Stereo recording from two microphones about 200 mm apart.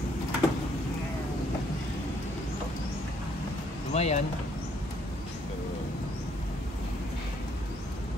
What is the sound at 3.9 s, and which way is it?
Vehicle, 35° left (ahead or behind).